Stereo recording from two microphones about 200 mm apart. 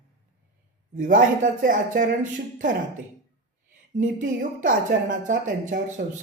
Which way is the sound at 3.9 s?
40° right (ahead or behind).